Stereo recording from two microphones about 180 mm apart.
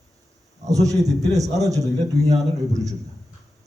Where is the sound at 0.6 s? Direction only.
20° right (ahead or behind).